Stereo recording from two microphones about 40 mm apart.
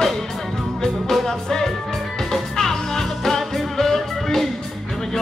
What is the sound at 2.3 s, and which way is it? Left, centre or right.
Music, centre.